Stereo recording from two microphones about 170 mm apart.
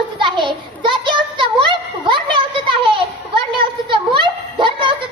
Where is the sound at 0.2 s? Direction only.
30° right (ahead or behind).